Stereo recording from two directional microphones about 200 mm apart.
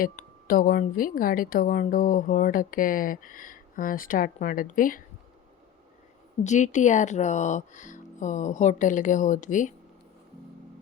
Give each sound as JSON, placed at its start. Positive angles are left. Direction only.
{"t": 0.0, "sound": "a woman's voice", "side_deg": 45}
{"t": 6.4, "sound": "speech", "side_deg": 35}